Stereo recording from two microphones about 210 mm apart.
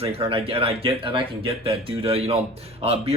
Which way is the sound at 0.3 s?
25° right (ahead or behind).